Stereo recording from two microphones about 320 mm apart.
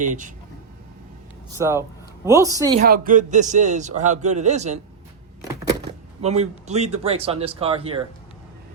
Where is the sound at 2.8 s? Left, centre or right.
Right.